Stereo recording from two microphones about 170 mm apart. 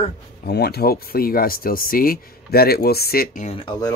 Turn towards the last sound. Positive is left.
turn(degrees=30)  # may be behind; listen again after turning